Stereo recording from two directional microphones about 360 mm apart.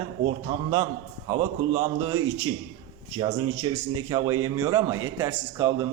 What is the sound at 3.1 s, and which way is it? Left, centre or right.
A man's voice, centre.